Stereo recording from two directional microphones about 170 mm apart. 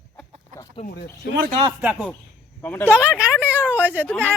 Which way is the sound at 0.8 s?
45° left (ahead or behind).